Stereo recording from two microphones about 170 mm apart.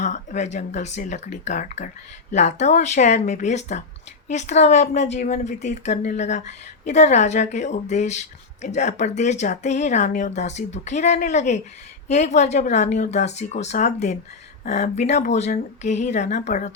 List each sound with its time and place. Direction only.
0.0 s speech: 45° left (ahead or behind)